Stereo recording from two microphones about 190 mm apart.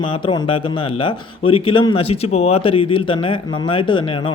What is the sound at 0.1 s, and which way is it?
Speech, 25° left (ahead or behind).